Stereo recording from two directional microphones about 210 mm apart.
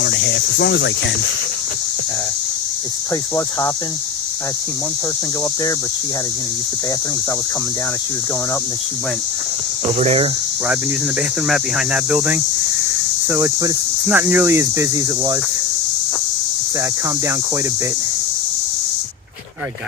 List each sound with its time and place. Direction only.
0.0 s cricket: 55° left (ahead or behind)
10.0 s speech: 30° right (ahead or behind)
11.4 s speech: centre (ahead or behind)